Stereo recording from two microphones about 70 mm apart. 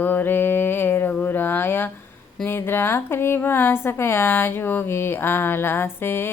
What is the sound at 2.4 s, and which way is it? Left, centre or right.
A woman's voice, left.